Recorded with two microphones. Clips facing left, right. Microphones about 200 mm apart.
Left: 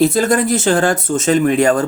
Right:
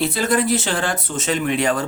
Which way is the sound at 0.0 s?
45° left (ahead or behind).